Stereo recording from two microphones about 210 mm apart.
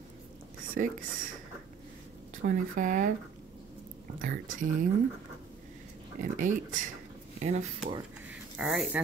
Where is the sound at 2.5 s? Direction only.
40° right (ahead or behind).